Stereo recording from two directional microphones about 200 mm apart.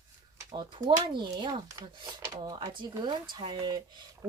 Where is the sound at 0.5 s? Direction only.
20° right (ahead or behind).